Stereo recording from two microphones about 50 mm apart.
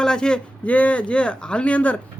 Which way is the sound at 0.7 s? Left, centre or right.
Left.